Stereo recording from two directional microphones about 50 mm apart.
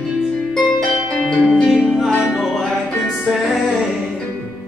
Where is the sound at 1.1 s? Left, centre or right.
Centre.